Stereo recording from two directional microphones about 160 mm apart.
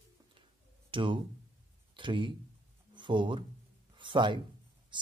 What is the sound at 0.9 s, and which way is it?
Speech, 30° right (ahead or behind).